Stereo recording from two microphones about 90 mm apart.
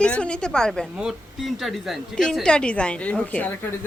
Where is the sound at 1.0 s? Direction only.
Centre (ahead or behind).